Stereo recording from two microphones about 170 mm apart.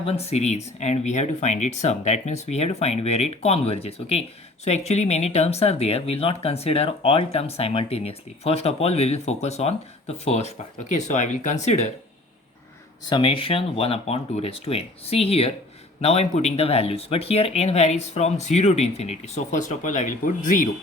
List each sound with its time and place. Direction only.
0.0 s speech: 35° left (ahead or behind)
13.1 s speech: 30° left (ahead or behind); by 20.7 s 50° left (ahead or behind)